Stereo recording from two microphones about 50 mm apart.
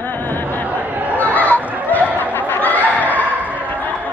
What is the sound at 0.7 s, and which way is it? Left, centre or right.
Chatter, right.